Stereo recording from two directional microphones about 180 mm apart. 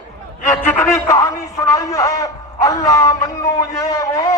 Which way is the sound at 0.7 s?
15° left (ahead or behind).